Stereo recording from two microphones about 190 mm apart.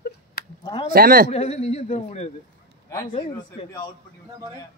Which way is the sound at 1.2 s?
35° left (ahead or behind).